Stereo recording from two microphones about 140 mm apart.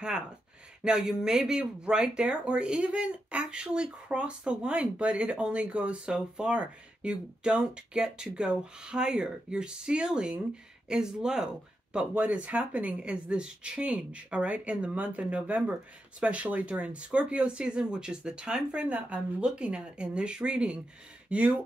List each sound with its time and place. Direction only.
0.8 s speech: 5° right (ahead or behind)